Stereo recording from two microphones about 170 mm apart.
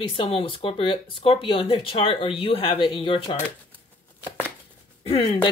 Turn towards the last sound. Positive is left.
turn(degrees=30)  # may be behind; listen again after turning